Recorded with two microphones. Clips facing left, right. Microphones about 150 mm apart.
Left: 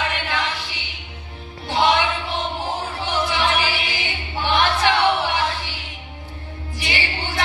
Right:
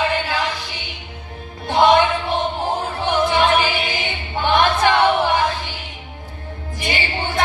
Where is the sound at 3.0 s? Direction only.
50° right (ahead or behind).